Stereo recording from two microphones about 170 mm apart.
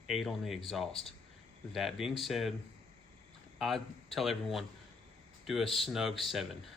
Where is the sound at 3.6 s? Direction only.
Centre (ahead or behind).